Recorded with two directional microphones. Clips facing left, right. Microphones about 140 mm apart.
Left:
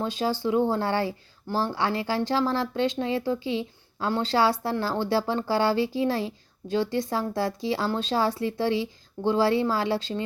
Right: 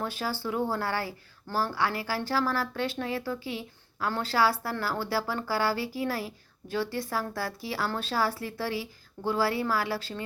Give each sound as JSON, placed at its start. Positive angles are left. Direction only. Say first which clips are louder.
{"t": 0.0, "sound": "a woman's voice", "louder": "left 6 dB", "side_deg": 20}